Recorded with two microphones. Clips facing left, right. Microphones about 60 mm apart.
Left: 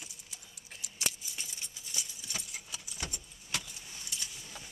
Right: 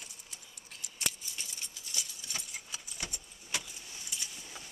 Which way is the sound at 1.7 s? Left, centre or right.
Centre.